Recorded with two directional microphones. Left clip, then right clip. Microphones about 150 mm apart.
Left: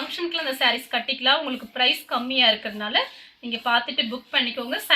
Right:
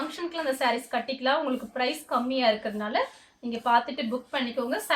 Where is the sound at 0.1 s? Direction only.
10° right (ahead or behind).